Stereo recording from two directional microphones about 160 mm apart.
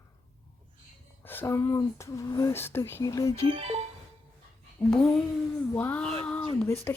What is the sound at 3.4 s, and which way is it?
Speech, 40° right (ahead or behind).